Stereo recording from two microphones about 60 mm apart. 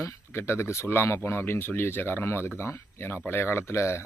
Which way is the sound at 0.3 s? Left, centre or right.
Left.